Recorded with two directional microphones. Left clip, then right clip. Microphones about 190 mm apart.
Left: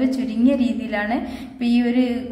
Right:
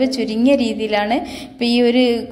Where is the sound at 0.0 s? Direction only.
30° right (ahead or behind).